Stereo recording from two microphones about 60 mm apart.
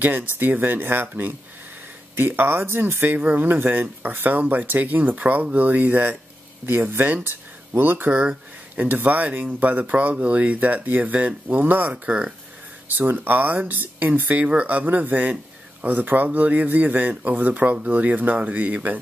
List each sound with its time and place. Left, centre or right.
0.0 s speech: right
12.1 s speech: centre
12.8 s speech: right
14.4 s speech: right